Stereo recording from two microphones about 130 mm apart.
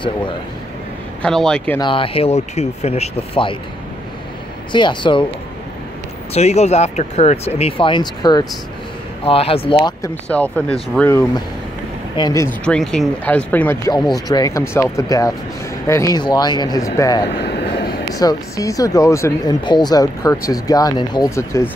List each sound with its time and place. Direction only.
1.2 s a man's voice: 5° left (ahead or behind)
1.8 s speech: 40° left (ahead or behind)
4.7 s speech: 35° left (ahead or behind)
6.3 s speech: 60° left (ahead or behind); by 8.5 s 35° left (ahead or behind)
9.2 s speech: 45° left (ahead or behind)
9.8 s speech: 25° left (ahead or behind)
10.2 s speech: 10° left (ahead or behind)
12.2 s speech: 30° left (ahead or behind)
12.6 s speech: 5° left (ahead or behind)
14.1 s speech: 30° left (ahead or behind)
19.6 s speech: 35° left (ahead or behind)